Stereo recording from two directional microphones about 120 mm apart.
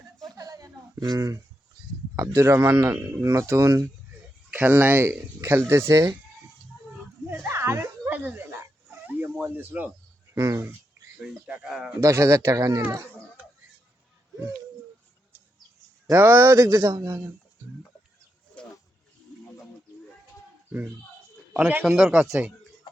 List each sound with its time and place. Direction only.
0.3 s a sound: 30° right (ahead or behind)
2.1 s a man's voice: 20° right (ahead or behind)
4.5 s speech: 15° right (ahead or behind)
7.3 s dog: 20° right (ahead or behind)
10.3 s a man's voice: 25° right (ahead or behind)
11.2 s speech: 10° right (ahead or behind)
11.9 s a man's voice: 25° right (ahead or behind)
16.0 s a man's voice: 20° right (ahead or behind)
18.6 s snake: 10° left (ahead or behind)
21.8 s speech: 5° right (ahead or behind)